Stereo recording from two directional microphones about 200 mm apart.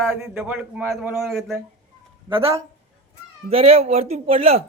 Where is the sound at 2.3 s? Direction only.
25° right (ahead or behind).